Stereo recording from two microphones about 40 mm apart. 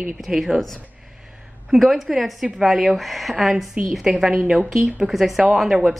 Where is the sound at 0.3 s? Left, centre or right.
Centre.